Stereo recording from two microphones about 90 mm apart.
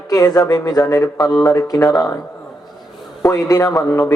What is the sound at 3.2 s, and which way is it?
Speech, 40° left (ahead or behind).